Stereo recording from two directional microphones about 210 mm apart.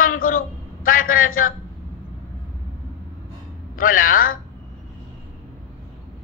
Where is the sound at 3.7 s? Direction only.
40° left (ahead or behind).